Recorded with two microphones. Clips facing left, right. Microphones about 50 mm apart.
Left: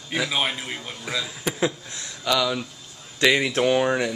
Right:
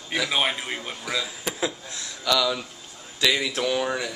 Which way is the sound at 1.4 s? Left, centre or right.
Centre.